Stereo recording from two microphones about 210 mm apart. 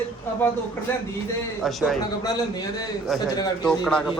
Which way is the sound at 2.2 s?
20° left (ahead or behind).